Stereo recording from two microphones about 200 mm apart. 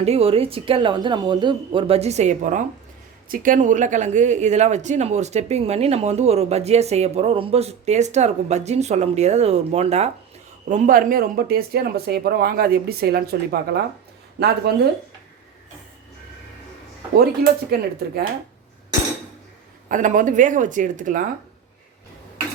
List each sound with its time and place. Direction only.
0.0 s speech: 30° right (ahead or behind); by 14.5 s 55° right (ahead or behind)
17.2 s speech: 50° right (ahead or behind)
19.9 s speech: 40° right (ahead or behind)